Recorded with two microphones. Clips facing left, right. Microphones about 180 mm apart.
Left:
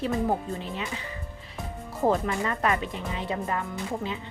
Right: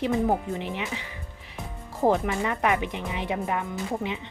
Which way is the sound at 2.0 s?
15° right (ahead or behind).